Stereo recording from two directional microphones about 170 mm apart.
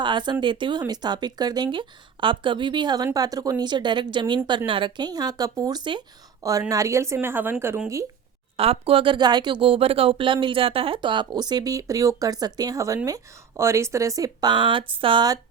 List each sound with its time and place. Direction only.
0.0 s speech: 25° right (ahead or behind)
8.5 s speech: 35° right (ahead or behind)